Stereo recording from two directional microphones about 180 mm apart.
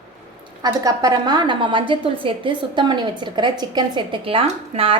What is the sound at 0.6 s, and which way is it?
A woman's voice, 20° right (ahead or behind).